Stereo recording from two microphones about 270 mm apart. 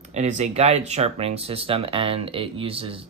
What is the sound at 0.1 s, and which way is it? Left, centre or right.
Speech, right.